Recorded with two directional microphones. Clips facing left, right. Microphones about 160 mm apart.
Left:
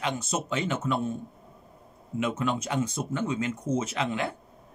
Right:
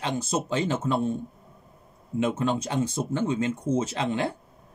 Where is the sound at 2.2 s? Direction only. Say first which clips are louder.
Right 3 dB; 30° right (ahead or behind).